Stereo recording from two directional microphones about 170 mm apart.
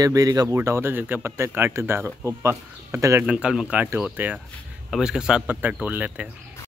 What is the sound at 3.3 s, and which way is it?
A man's voice, 5° right (ahead or behind).